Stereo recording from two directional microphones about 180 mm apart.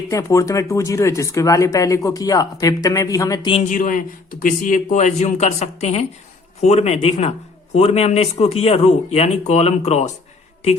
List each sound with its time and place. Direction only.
0.1 s speech: 15° left (ahead or behind)
3.6 s a man's voice: 45° left (ahead or behind)